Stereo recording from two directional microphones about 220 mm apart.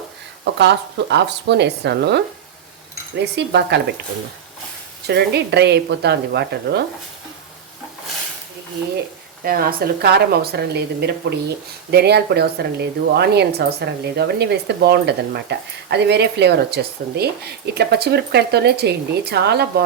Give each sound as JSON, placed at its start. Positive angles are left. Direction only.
{"t": 0.6, "sound": "speech", "side_deg": -50}
{"t": 5.0, "sound": "speech", "side_deg": -50}
{"t": 9.4, "sound": "speech", "side_deg": -40}